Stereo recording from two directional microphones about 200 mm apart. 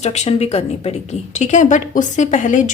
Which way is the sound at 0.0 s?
35° left (ahead or behind).